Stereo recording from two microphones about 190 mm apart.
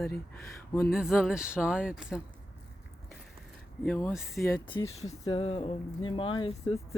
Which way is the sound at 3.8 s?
5° left (ahead or behind).